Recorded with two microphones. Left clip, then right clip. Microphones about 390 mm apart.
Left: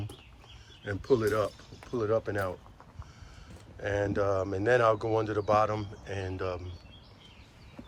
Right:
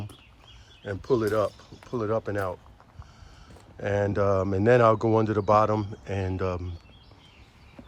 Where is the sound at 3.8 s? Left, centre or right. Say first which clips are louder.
Right 4 dB; centre.